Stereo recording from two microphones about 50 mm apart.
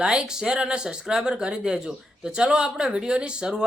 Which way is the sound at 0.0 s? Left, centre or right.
Centre.